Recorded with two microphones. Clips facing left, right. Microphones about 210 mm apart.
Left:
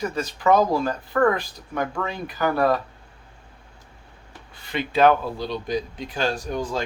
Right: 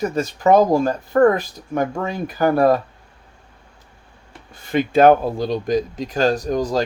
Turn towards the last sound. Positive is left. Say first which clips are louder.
# right 7 dB
turn(degrees=-40)  # may be behind; listen again after turning